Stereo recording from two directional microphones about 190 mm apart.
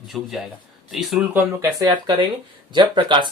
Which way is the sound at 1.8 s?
25° right (ahead or behind).